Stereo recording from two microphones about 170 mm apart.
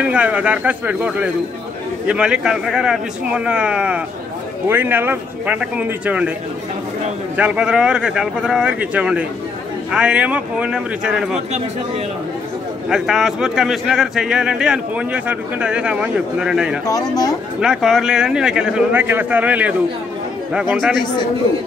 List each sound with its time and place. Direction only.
0.0 s speech: 5° right (ahead or behind)
7.3 s a man's voice: 5° right (ahead or behind)
12.9 s a man's voice: centre (ahead or behind)
16.8 s speech: 20° left (ahead or behind)
17.6 s a man's voice: 5° right (ahead or behind)
20.7 s a man's voice: centre (ahead or behind)